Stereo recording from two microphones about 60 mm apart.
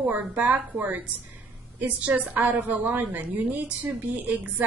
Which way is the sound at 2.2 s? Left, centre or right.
Right.